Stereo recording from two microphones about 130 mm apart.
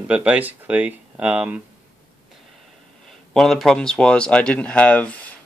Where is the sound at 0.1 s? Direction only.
10° right (ahead or behind).